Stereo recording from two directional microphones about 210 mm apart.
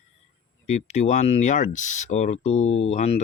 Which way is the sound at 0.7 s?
30° left (ahead or behind).